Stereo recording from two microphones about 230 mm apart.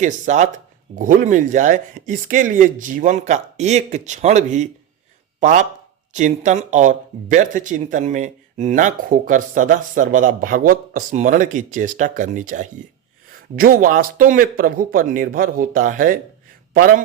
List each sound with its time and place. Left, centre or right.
0.0 s a man's voice: right